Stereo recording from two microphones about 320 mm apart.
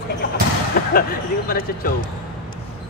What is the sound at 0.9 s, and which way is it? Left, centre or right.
Speech, left.